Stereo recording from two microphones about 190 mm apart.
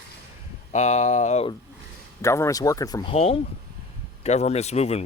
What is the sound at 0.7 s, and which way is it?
Speech, 35° left (ahead or behind).